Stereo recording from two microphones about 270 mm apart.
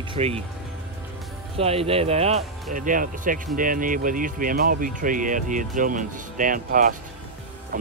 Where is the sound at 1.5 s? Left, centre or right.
Right.